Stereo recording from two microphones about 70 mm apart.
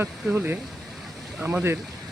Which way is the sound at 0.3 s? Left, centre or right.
Right.